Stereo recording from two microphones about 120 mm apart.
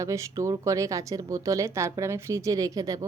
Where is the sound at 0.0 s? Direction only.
25° right (ahead or behind).